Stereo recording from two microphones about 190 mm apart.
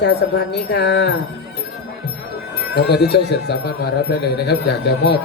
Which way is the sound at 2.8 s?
60° left (ahead or behind).